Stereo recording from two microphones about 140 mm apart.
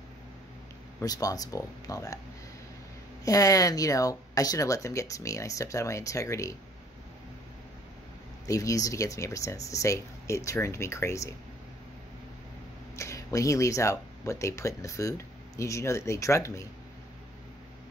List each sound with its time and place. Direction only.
1.0 s speech: 25° left (ahead or behind)
3.3 s speech: 25° left (ahead or behind)
8.5 s speech: 25° left (ahead or behind)
12.9 s speech: 20° left (ahead or behind)